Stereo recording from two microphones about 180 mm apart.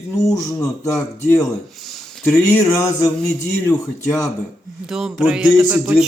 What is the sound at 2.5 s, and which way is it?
Speech, 15° left (ahead or behind).